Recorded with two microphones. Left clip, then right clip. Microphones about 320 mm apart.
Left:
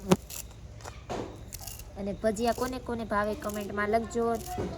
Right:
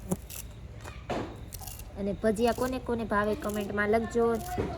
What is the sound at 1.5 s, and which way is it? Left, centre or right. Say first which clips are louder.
Speech: even; centre.